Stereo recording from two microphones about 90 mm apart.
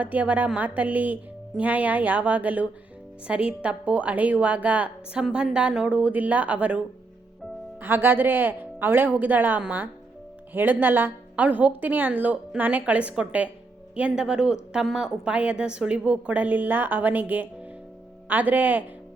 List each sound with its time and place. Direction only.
0.0 s a woman's voice: 15° right (ahead or behind)